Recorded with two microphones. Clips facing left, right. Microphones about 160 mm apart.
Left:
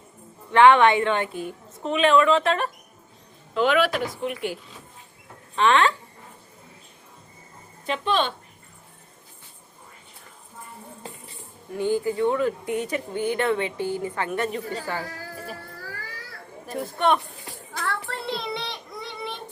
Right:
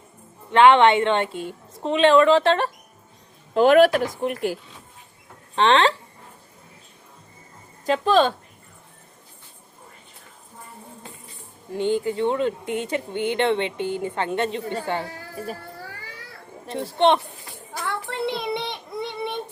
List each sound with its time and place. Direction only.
0.5 s speech: 20° right (ahead or behind)
3.5 s speech: 45° right (ahead or behind)
5.5 s speech: 30° right (ahead or behind)
7.9 s speech: 40° right (ahead or behind)
11.7 s speech: 20° right (ahead or behind)
16.6 s speech: 25° right (ahead or behind)
17.8 s child singing: 15° right (ahead or behind)